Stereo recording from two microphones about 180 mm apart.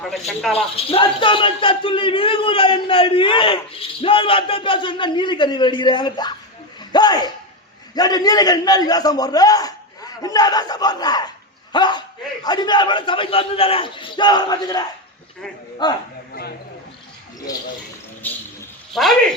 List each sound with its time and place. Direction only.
0.1 s speech: centre (ahead or behind)
0.9 s a man's voice: 30° left (ahead or behind)
18.2 s a sound: 10° left (ahead or behind)
18.9 s speech: centre (ahead or behind)